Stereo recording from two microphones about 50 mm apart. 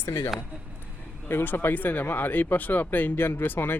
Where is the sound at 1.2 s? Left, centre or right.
Left.